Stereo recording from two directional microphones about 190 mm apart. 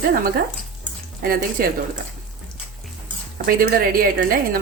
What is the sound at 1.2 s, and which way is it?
Speech, 50° right (ahead or behind).